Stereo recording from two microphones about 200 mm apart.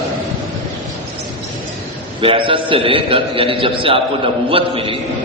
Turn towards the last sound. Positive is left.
turn(degrees=-25)  # may be behind; listen again after turning